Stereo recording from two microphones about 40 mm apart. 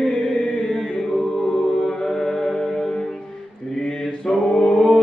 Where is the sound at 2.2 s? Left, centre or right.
Centre.